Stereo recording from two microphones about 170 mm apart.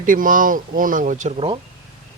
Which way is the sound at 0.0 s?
50° right (ahead or behind).